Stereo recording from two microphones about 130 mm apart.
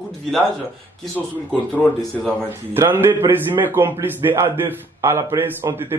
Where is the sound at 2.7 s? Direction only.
15° right (ahead or behind).